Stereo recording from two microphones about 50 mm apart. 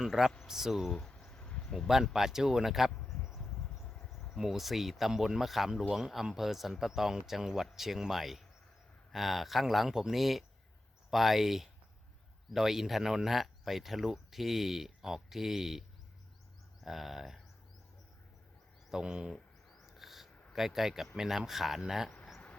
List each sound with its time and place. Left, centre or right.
0.0 s speech: centre
0.9 s a sound: centre
1.4 s a sound: left
2.1 s speech: centre
4.4 s speech: centre
16.8 s speech: centre
18.9 s speech: centre
19.3 s a sound: centre
20.5 s speech: centre